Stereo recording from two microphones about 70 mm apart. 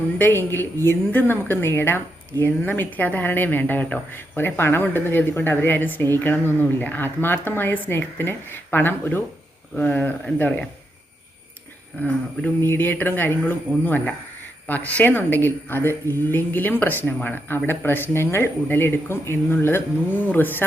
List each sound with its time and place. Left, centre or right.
0.2 s speech: left
11.9 s speech: left